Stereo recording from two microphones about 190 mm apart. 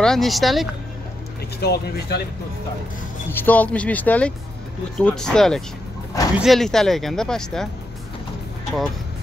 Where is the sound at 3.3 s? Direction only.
10° left (ahead or behind).